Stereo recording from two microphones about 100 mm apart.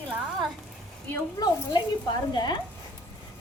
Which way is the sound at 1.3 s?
45° left (ahead or behind).